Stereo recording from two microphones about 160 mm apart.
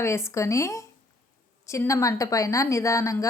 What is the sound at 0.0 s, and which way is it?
A woman's voice, 15° left (ahead or behind).